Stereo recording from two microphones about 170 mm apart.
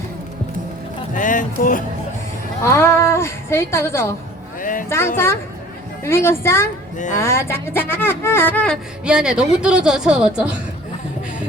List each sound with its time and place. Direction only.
1.1 s speech: 50° left (ahead or behind)
2.6 s speech: 15° left (ahead or behind)
4.6 s speech: 50° left (ahead or behind)
4.9 s speech: 15° left (ahead or behind)
9.0 s a woman's voice: 5° right (ahead or behind)